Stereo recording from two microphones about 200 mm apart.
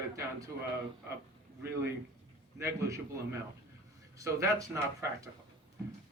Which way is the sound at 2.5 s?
15° right (ahead or behind).